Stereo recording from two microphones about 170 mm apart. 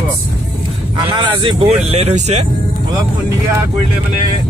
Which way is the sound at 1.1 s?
30° right (ahead or behind).